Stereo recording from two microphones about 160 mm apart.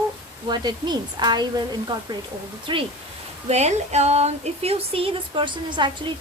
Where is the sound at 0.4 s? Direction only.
25° right (ahead or behind).